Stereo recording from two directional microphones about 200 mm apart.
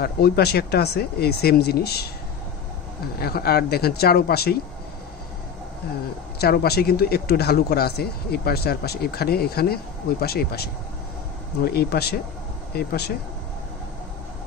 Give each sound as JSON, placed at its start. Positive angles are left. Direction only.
{"t": 0.0, "sound": "speech", "side_deg": 50}
{"t": 3.2, "sound": "speech", "side_deg": 50}
{"t": 6.4, "sound": "speech", "side_deg": 50}